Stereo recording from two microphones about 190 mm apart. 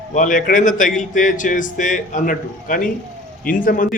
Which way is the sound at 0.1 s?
45° left (ahead or behind).